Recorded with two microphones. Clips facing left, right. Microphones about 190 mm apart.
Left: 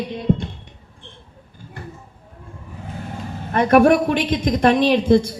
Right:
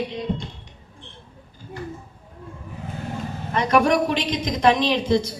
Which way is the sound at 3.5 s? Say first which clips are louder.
Left 6 dB; 55° left (ahead or behind).